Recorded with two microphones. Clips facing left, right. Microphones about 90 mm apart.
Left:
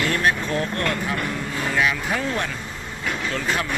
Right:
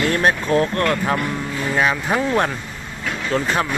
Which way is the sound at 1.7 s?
35° right (ahead or behind).